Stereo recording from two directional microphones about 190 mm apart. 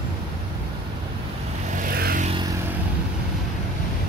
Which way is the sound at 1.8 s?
50° right (ahead or behind).